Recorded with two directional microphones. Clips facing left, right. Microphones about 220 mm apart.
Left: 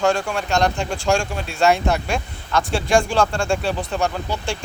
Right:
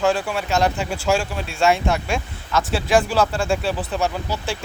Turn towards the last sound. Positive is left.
turn(degrees=-5)  # may be behind; listen again after turning